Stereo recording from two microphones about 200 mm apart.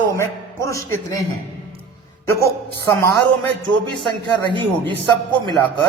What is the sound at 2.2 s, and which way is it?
Speech, 15° left (ahead or behind).